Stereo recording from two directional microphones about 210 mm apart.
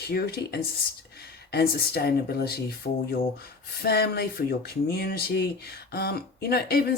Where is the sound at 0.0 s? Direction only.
50° left (ahead or behind).